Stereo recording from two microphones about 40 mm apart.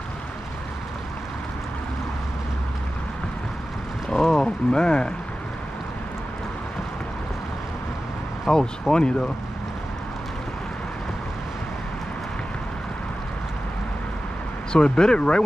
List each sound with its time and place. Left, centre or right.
4.1 s boat: centre
4.6 s speech: left
8.5 s speech: centre
14.7 s speech: centre